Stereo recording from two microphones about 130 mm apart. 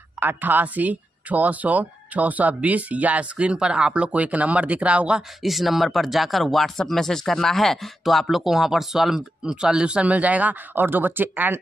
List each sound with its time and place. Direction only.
0.2 s speech: 15° right (ahead or behind)